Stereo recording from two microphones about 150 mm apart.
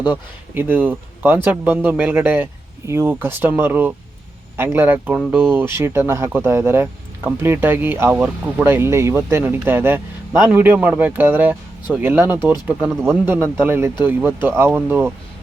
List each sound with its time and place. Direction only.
0.1 s speech: 10° right (ahead or behind)